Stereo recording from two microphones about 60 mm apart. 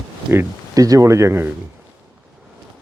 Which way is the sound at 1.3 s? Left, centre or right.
Right.